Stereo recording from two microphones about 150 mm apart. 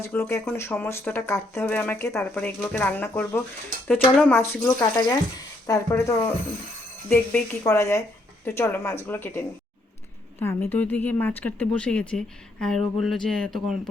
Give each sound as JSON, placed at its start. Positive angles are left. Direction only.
{"t": 0.0, "sound": "speech", "side_deg": 15}
{"t": 4.8, "sound": "a woman's voice", "side_deg": 25}
{"t": 10.4, "sound": "speech", "side_deg": 15}